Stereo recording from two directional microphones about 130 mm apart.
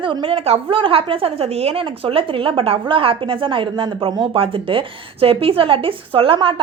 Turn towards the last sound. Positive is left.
turn(degrees=-40)  # may be behind; listen again after turning